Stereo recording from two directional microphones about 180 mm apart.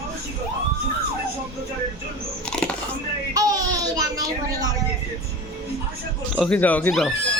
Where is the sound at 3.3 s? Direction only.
20° right (ahead or behind).